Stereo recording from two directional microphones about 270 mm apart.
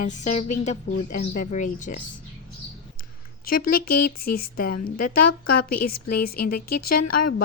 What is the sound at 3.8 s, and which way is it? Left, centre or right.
Speech, left.